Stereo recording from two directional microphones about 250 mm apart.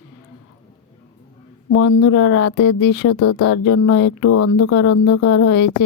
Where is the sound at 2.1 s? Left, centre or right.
Left.